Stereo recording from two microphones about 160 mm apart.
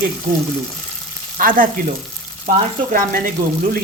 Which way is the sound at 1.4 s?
60° right (ahead or behind).